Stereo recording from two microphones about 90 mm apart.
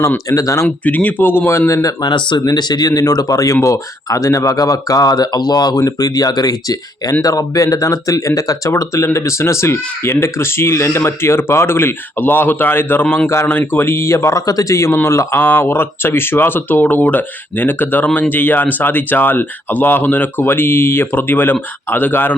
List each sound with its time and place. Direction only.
0.3 s speech: 40° left (ahead or behind)
0.9 s speech: 20° left (ahead or behind); by 1.9 s 35° left (ahead or behind)
2.0 s speech: 55° left (ahead or behind); by 22.4 s 20° left (ahead or behind)